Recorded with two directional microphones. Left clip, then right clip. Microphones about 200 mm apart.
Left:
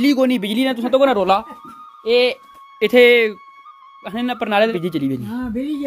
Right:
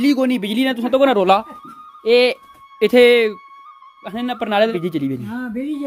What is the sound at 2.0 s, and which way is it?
Speech, 45° right (ahead or behind).